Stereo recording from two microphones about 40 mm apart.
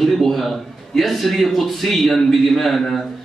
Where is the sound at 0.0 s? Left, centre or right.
Centre.